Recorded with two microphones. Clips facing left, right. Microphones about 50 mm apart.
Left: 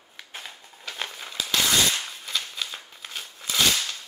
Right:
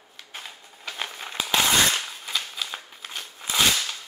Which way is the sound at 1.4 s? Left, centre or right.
Right.